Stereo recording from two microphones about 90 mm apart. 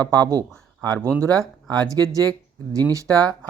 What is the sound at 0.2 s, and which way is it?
Speech, 45° right (ahead or behind).